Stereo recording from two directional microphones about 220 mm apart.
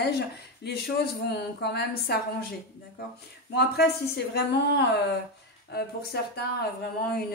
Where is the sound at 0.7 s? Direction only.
45° left (ahead or behind).